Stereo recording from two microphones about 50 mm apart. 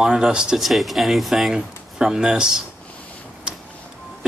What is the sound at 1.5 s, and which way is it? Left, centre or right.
Speech, centre.